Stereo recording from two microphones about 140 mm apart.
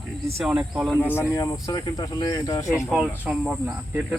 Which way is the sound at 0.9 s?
15° left (ahead or behind).